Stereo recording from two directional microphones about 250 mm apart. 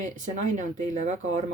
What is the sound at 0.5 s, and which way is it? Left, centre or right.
Speech, right.